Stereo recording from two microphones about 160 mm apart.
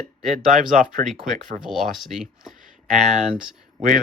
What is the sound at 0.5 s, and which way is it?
Speech, 55° right (ahead or behind).